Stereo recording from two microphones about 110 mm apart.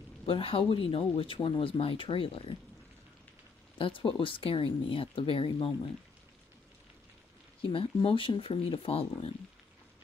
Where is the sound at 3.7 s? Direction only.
50° left (ahead or behind).